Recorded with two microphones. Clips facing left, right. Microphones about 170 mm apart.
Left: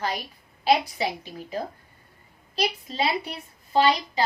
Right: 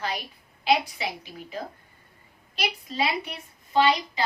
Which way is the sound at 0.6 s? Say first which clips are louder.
Left 2 dB; 35° left (ahead or behind).